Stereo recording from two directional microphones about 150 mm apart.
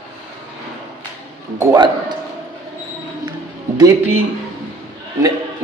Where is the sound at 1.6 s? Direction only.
25° right (ahead or behind).